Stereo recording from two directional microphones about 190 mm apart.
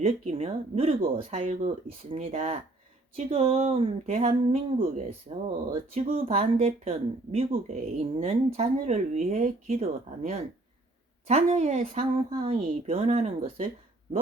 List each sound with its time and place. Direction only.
0.0 s speech: 30° right (ahead or behind)